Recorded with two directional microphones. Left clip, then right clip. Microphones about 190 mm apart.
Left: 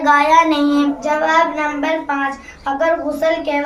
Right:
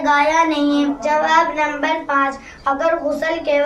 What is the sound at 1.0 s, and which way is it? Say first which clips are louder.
A child's voice: right 1 dB; 15° right (ahead or behind).